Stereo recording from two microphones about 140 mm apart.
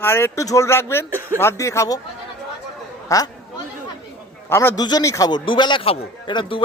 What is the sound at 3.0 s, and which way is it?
Speech, 25° left (ahead or behind).